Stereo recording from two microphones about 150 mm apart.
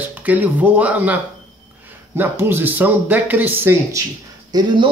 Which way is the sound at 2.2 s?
15° right (ahead or behind).